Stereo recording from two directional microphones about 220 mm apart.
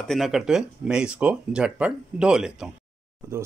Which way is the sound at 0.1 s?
Centre (ahead or behind).